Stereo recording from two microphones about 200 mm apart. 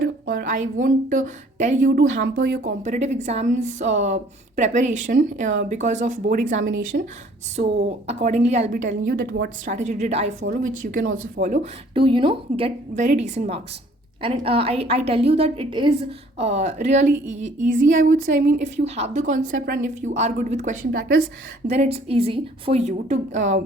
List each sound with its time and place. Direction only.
0.3 s a woman's voice: 45° right (ahead or behind)
1.9 s a woman's voice: 60° right (ahead or behind)
7.8 s a woman's voice: 35° right (ahead or behind)
9.7 s a woman's voice: 35° right (ahead or behind)
11.9 s a woman's voice: 25° right (ahead or behind)